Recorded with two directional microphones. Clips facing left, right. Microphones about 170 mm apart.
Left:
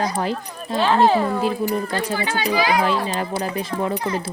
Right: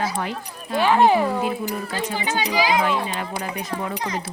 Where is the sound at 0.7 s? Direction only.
15° right (ahead or behind).